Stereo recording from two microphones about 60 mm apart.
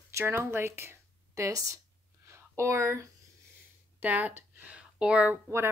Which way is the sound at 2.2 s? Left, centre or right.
Right.